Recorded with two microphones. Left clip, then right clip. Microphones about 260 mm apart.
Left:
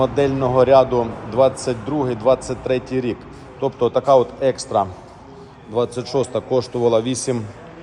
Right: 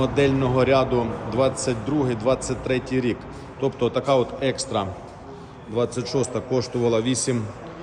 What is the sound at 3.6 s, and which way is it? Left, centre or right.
Speech, left.